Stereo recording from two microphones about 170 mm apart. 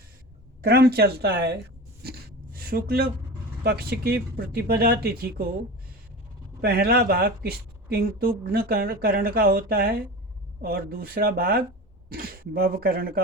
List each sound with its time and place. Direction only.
0.6 s speech: 65° right (ahead or behind)
2.0 s a sound: 60° right (ahead or behind)
3.6 s speech: 65° right (ahead or behind)
6.6 s speech: 65° right (ahead or behind)